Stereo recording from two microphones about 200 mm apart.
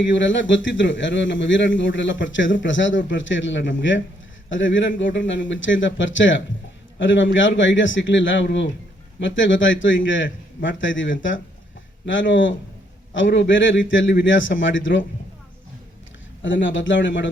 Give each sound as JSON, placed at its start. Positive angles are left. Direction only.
{"t": 0.0, "sound": "a man's voice", "side_deg": 65}
{"t": 16.4, "sound": "a man's voice", "side_deg": 70}